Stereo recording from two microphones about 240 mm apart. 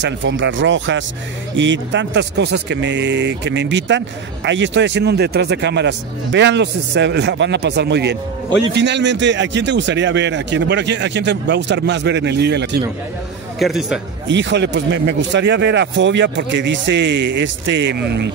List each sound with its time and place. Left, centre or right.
0.0 s speech: right
13.6 s a man's voice: centre
14.2 s speech: right